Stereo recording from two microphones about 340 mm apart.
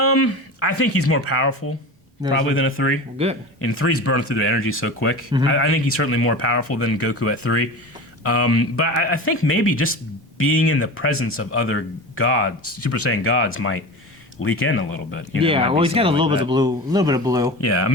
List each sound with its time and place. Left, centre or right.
0.0 s speech: left
3.2 s speech: centre
3.6 s speech: left
15.4 s speech: centre
17.6 s speech: left